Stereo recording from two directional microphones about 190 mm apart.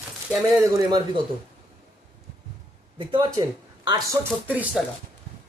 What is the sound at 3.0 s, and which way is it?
Speech, 25° right (ahead or behind).